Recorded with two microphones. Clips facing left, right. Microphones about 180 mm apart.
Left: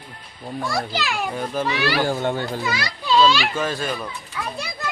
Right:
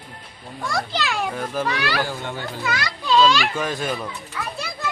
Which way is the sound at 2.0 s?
50° left (ahead or behind).